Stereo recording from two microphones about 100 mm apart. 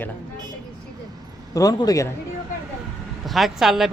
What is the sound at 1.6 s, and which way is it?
Speech, 40° left (ahead or behind).